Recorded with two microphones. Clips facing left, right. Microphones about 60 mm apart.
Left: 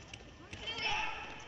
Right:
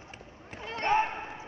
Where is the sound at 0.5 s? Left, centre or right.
Right.